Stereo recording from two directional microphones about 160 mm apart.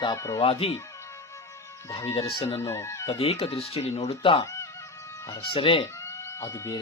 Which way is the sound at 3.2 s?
40° left (ahead or behind).